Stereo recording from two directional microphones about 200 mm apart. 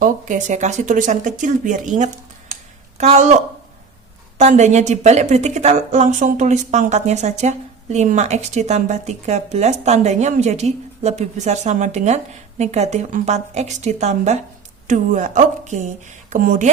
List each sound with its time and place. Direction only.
0.0 s a woman's voice: 40° right (ahead or behind)